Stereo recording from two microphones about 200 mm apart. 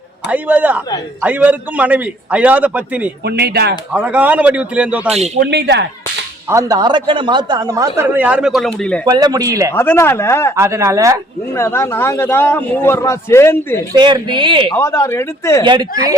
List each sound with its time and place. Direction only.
0.3 s speech: 5° right (ahead or behind)
3.2 s speech: 55° right (ahead or behind)
3.9 s speech: 10° right (ahead or behind)
5.4 s speech: 60° right (ahead or behind)
6.5 s speech: 15° right (ahead or behind); by 9.0 s centre (ahead or behind)
9.0 s speech: 20° right (ahead or behind)
9.7 s a man's voice: 10° left (ahead or behind)
10.5 s speech: 15° right (ahead or behind)
11.5 s a man's voice: 15° left (ahead or behind)
13.9 s speech: 20° right (ahead or behind)
14.7 s a man's voice: 15° left (ahead or behind)
15.6 s speech: 20° right (ahead or behind)